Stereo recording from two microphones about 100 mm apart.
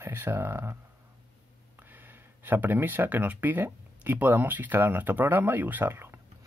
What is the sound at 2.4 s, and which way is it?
Speech, 20° right (ahead or behind).